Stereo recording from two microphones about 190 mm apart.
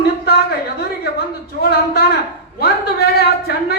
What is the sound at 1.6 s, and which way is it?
Speech, 55° left (ahead or behind).